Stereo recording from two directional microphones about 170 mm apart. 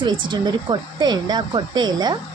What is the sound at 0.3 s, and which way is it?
A woman's voice, 25° right (ahead or behind).